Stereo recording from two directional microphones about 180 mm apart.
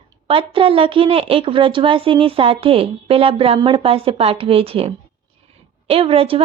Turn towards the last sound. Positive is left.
turn(degrees=-30)  # may be behind; listen again after turning